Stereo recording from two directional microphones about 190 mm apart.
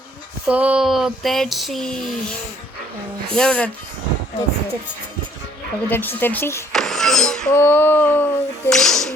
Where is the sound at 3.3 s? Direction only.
5° left (ahead or behind).